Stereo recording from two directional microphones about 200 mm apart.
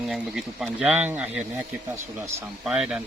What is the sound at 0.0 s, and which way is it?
Speech, centre (ahead or behind).